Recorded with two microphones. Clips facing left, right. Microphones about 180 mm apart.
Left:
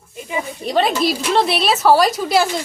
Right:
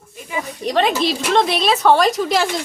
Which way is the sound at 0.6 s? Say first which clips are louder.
Even; 5° left (ahead or behind).